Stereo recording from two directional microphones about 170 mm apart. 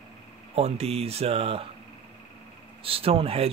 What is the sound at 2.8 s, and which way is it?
Speech, 35° right (ahead or behind).